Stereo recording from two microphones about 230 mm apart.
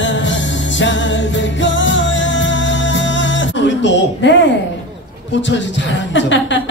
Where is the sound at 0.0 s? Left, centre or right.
Left.